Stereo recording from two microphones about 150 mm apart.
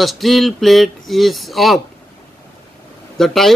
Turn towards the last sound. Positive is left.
turn(degrees=0)  # may be behind; listen again after turning